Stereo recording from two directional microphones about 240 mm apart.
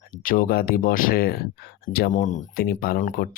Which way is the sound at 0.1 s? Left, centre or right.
Left.